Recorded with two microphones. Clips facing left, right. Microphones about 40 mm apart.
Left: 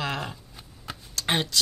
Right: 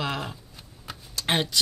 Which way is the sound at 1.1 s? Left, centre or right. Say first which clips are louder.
Right 1 dB; centre.